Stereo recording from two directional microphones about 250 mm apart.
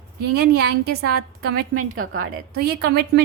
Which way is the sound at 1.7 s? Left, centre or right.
Right.